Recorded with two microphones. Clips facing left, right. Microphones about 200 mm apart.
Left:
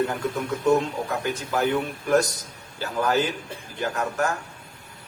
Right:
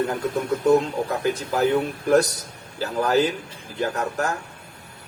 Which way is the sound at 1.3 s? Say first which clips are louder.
Right 2 dB; 35° right (ahead or behind).